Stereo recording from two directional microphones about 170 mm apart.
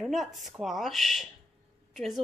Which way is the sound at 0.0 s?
Centre (ahead or behind).